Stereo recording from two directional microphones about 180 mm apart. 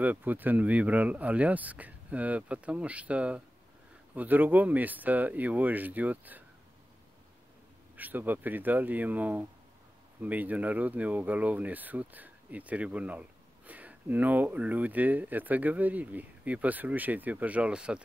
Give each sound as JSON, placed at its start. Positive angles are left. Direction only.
{"t": 0.0, "sound": "speech", "side_deg": -10}
{"t": 7.9, "sound": "speech", "side_deg": -10}